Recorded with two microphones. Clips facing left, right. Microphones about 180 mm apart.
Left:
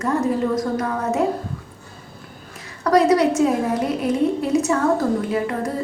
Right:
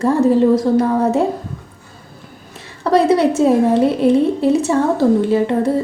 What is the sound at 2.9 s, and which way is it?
A woman's voice, 25° right (ahead or behind).